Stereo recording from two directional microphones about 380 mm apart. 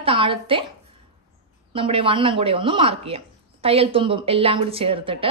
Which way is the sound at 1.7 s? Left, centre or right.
Centre.